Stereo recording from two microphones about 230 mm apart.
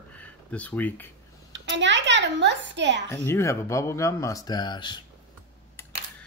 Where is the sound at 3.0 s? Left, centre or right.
Centre.